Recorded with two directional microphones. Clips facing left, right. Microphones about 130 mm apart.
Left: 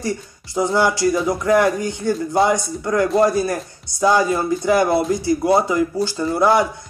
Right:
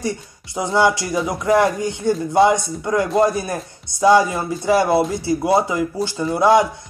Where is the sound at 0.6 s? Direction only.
20° right (ahead or behind).